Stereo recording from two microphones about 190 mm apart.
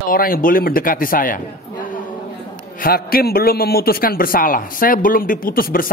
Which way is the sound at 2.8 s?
55° left (ahead or behind).